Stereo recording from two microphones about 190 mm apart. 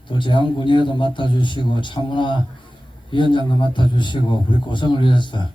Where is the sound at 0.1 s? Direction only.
25° left (ahead or behind).